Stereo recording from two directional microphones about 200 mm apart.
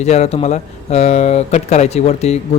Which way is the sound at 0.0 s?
35° left (ahead or behind).